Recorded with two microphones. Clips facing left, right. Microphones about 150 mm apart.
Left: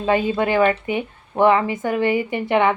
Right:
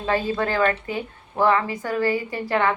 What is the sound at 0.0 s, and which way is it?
A woman's voice, 15° left (ahead or behind).